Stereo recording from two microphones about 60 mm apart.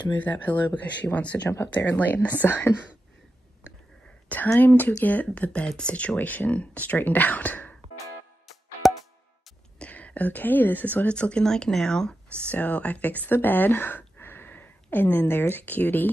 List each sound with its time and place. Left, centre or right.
0.0 s speech: left
1.5 s speech: left
1.9 s speech: left
4.6 s speech: left
9.8 s a woman's voice: left
11.1 s speech: centre
12.5 s speech: left